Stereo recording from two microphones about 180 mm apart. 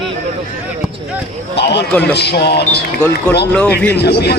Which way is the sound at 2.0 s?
65° left (ahead or behind).